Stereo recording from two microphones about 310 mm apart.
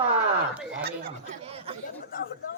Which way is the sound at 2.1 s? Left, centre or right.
Left.